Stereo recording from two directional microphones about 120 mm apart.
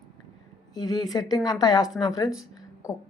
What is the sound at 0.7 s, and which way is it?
A woman's voice, 35° left (ahead or behind).